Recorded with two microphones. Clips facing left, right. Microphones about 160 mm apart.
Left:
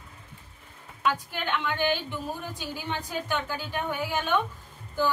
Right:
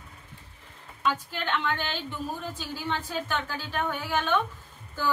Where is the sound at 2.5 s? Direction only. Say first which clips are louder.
Right 1 dB; 15° left (ahead or behind).